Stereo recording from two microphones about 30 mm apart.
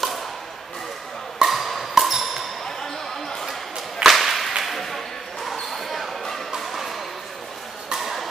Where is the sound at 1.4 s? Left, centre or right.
Centre.